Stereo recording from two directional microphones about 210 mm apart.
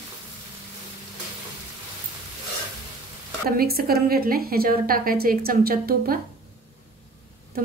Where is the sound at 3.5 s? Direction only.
45° right (ahead or behind).